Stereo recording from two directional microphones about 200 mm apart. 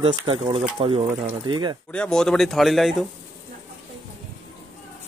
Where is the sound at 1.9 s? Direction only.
5° left (ahead or behind).